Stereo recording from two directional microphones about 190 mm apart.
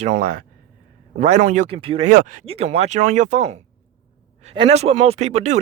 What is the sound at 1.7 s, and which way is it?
Speech, 30° right (ahead or behind).